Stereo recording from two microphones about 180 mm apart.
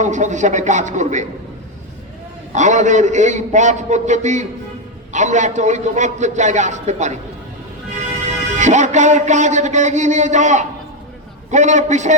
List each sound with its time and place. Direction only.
0.0 s speech: 40° right (ahead or behind)
2.5 s a man's voice: 40° right (ahead or behind)
8.5 s a man's voice: 40° right (ahead or behind)